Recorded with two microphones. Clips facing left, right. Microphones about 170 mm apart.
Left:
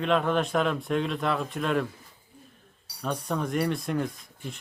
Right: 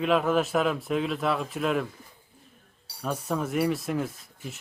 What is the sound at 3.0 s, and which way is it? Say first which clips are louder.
A man's voice: even; 5° right (ahead or behind).